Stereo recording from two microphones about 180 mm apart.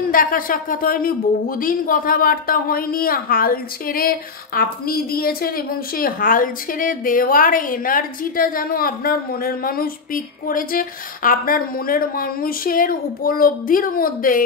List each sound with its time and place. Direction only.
0.1 s a woman's voice: 50° left (ahead or behind)